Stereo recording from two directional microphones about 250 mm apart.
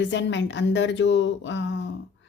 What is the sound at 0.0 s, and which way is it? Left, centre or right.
Speech, left.